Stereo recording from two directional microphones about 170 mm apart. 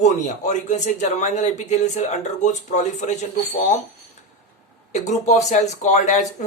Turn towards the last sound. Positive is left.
turn(degrees=45)  # may be behind; listen again after turning